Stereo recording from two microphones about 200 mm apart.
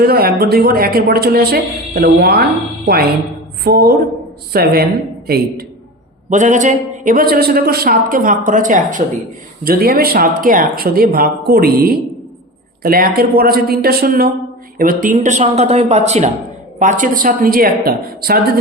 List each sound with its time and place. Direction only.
0.0 s a woman's voice: 50° right (ahead or behind)
6.3 s a man's voice: 40° right (ahead or behind)